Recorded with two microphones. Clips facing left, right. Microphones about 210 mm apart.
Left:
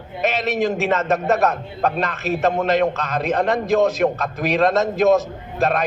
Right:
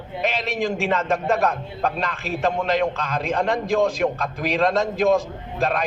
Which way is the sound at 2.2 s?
45° left (ahead or behind).